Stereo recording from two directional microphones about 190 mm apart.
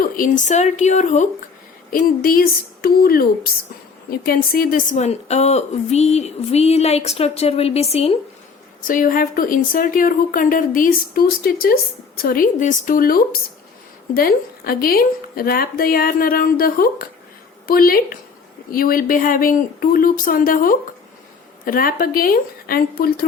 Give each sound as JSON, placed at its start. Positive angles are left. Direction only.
{"t": 0.0, "sound": "a woman's voice", "side_deg": 45}
{"t": 1.9, "sound": "speech", "side_deg": 50}
{"t": 4.3, "sound": "a woman's voice", "side_deg": 50}
{"t": 8.8, "sound": "speech", "side_deg": 45}